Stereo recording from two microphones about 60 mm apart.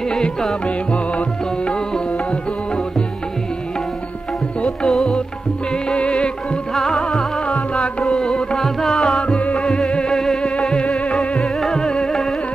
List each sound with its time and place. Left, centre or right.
0.1 s music: centre
0.7 s music: centre
4.6 s music: centre
6.7 s music: centre
7.4 s music: centre
11.3 s music: centre